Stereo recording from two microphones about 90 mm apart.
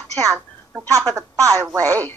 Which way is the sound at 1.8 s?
20° left (ahead or behind).